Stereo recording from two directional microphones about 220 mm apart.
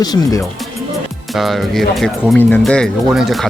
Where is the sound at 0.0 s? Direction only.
15° left (ahead or behind).